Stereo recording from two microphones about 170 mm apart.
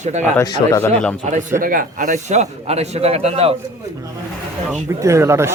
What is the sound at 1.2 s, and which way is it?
A man's voice, 45° right (ahead or behind).